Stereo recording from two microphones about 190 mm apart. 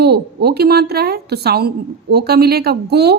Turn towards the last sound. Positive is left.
turn(degrees=-60)  # may be behind; listen again after turning